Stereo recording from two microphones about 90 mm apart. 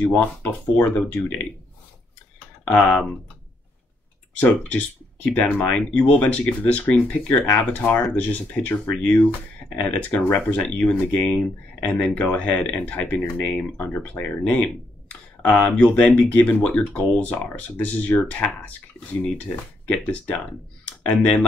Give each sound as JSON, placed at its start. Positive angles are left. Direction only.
{"t": 0.0, "sound": "speech", "side_deg": 15}
{"t": 4.4, "sound": "speech", "side_deg": 15}
{"t": 19.9, "sound": "speech", "side_deg": 15}